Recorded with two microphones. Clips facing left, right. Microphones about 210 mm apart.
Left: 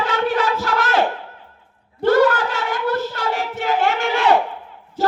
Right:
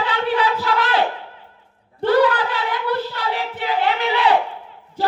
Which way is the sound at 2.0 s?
45° left (ahead or behind).